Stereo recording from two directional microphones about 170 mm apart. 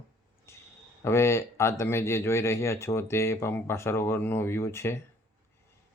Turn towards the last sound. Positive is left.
turn(degrees=15)  # may be behind; listen again after turning